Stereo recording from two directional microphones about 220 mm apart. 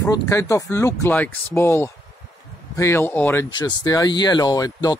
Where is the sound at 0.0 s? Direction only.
15° left (ahead or behind).